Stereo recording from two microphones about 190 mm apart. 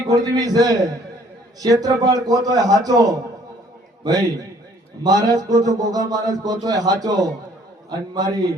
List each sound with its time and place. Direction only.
0.1 s a man's voice: 20° right (ahead or behind)